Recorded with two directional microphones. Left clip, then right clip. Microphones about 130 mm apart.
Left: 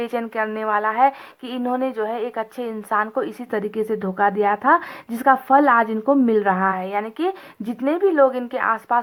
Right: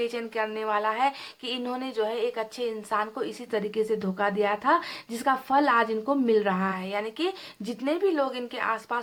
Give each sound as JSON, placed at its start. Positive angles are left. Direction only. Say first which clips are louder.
{"t": 0.0, "sound": "a woman's voice", "louder": "left 5 dB", "side_deg": 35}